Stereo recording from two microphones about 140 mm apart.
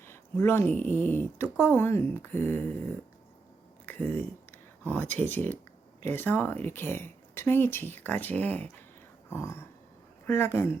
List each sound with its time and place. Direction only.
0.0 s speech: 15° left (ahead or behind)
4.8 s speech: 15° left (ahead or behind)
9.3 s a sound: 20° left (ahead or behind)
10.2 s speech: 15° left (ahead or behind)